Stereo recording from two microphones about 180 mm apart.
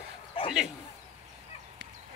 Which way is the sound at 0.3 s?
30° left (ahead or behind).